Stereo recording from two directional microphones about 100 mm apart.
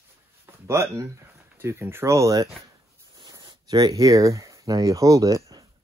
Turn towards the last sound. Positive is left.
turn(degrees=-35)  # may be behind; listen again after turning